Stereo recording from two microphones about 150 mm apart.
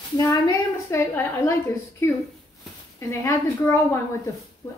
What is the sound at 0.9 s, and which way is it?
Speech, 20° left (ahead or behind).